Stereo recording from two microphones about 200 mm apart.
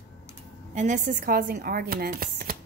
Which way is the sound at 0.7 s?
40° right (ahead or behind).